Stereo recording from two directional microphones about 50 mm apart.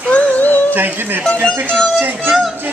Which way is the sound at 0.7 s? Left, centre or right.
Right.